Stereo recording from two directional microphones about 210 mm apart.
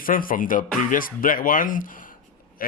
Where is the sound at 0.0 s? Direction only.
40° left (ahead or behind).